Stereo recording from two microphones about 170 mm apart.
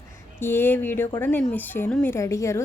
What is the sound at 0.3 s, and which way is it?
Speech, 15° left (ahead or behind).